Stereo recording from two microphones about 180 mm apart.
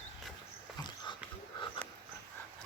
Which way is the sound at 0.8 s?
25° left (ahead or behind).